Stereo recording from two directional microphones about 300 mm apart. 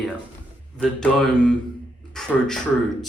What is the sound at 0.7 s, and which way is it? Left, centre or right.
Speech, centre.